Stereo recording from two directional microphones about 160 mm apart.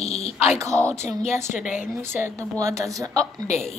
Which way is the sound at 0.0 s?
40° left (ahead or behind).